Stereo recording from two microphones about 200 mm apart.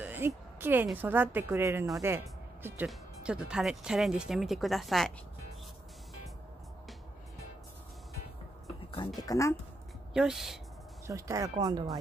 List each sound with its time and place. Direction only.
0.0 s a sound: 10° right (ahead or behind)
0.8 s a woman's voice: 10° right (ahead or behind)
9.2 s speech: 15° left (ahead or behind)
10.1 s speech: centre (ahead or behind)
11.1 s a woman's voice: 15° right (ahead or behind)